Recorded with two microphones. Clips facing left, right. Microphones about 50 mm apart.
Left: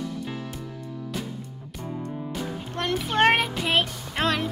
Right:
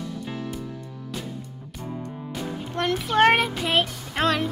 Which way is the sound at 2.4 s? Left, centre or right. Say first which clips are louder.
Right 5 dB; centre.